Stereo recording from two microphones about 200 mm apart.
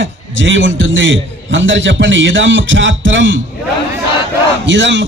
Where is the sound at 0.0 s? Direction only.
70° right (ahead or behind).